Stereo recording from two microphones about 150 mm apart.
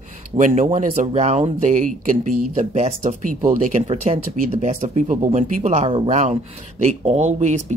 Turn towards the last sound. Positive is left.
turn(degrees=-50)  # may be behind; listen again after turning